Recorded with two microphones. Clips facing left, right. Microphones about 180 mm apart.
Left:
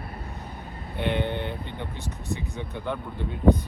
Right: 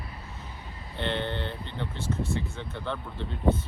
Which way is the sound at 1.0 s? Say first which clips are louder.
Left 3 dB; 15° left (ahead or behind).